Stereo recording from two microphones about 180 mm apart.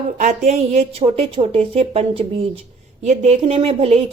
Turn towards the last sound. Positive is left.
turn(degrees=-35)  # may be behind; listen again after turning